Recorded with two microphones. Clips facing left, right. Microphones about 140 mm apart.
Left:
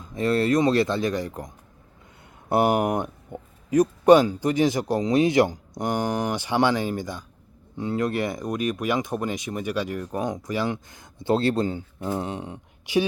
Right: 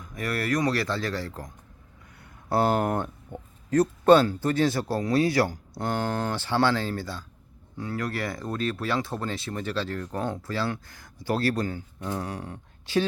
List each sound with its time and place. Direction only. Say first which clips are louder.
0.0 s speech: left 8 dB; 25° left (ahead or behind)